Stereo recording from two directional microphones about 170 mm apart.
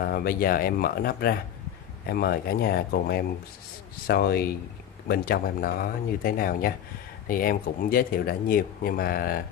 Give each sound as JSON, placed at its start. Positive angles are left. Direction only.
{"t": 0.0, "sound": "speech", "side_deg": 60}